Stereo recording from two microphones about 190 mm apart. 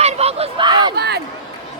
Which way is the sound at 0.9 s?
60° right (ahead or behind).